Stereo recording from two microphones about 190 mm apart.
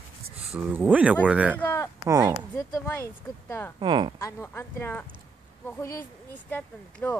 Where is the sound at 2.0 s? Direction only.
20° right (ahead or behind).